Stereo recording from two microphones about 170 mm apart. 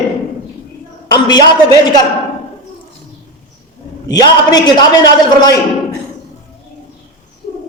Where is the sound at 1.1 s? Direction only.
25° left (ahead or behind).